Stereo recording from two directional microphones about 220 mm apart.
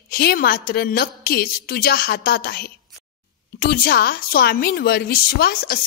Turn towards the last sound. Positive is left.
turn(degrees=45)  # may be behind; listen again after turning